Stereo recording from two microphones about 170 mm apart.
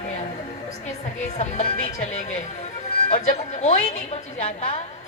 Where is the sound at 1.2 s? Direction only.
45° left (ahead or behind).